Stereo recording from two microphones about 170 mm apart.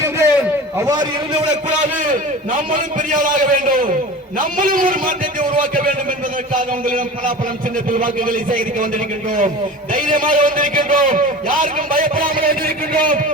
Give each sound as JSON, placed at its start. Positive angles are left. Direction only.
{"t": 0.0, "sound": "a sound", "side_deg": -15}
{"t": 1.8, "sound": "a man's voice", "side_deg": -50}
{"t": 9.9, "sound": "a man's voice", "side_deg": -55}